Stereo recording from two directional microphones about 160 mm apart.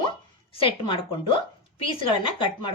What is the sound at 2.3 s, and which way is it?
Speech, 30° left (ahead or behind).